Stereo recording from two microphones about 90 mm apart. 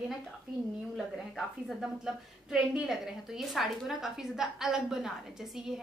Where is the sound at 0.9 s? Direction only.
Centre (ahead or behind).